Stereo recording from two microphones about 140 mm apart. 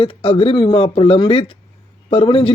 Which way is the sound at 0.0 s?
40° left (ahead or behind).